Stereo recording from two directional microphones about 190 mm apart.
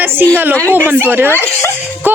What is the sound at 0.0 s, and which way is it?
Speech, 10° right (ahead or behind).